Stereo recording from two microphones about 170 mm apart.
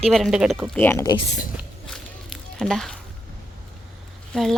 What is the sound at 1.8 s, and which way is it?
Walk, centre (ahead or behind).